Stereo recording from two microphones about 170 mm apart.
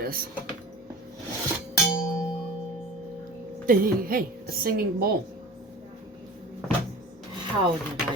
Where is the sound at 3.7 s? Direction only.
60° right (ahead or behind).